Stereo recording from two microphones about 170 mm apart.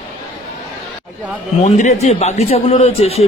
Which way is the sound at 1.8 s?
45° left (ahead or behind).